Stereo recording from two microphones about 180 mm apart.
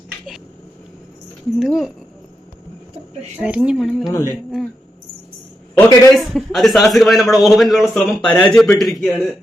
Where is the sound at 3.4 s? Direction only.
5° right (ahead or behind).